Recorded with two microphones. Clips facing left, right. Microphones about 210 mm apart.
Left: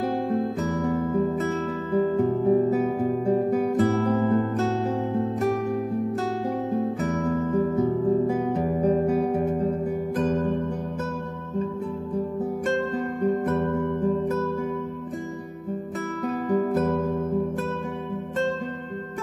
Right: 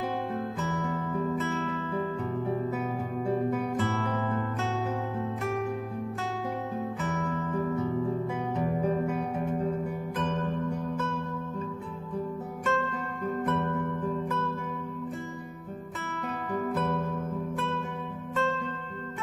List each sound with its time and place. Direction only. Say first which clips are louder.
0.3 s music: left 7 dB; 40° left (ahead or behind)
6.7 s music: left 7 dB; 40° left (ahead or behind)
12.6 s music: left 3 dB; 40° left (ahead or behind)
16.4 s music: left 7 dB; 35° left (ahead or behind)